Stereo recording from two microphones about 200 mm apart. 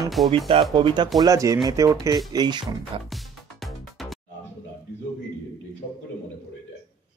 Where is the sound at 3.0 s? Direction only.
Centre (ahead or behind).